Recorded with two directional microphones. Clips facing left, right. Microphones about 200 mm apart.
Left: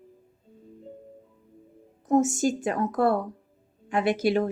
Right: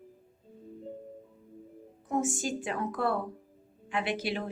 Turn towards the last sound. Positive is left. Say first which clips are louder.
# left 9 dB
turn(degrees=45)  # may be behind; listen again after turning